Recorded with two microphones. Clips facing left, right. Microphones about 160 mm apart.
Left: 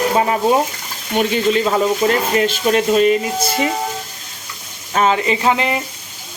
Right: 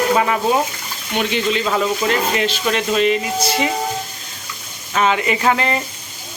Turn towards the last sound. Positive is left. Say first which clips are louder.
# left 1 dB
turn(degrees=15)  # may be behind; listen again after turning